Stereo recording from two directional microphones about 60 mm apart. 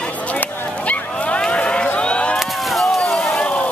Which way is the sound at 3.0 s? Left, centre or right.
Centre.